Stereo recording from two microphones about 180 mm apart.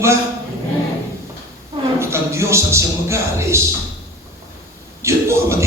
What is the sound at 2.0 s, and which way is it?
A man's voice, 15° right (ahead or behind).